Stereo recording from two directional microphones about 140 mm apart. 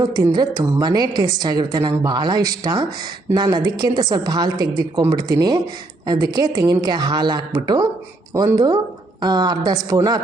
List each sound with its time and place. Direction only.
0.0 s a woman's voice: 25° right (ahead or behind)